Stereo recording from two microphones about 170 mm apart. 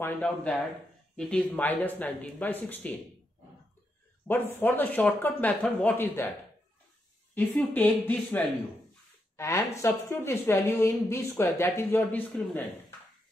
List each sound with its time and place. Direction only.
0.0 s a woman's voice: 10° left (ahead or behind)
4.3 s a woman's voice: 10° left (ahead or behind)
7.3 s a woman's voice: 10° left (ahead or behind)